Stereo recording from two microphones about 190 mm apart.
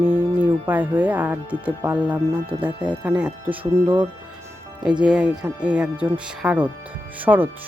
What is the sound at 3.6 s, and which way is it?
Speech, 25° right (ahead or behind).